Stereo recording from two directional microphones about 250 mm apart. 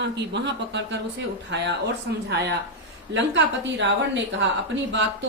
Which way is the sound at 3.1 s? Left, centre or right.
Right.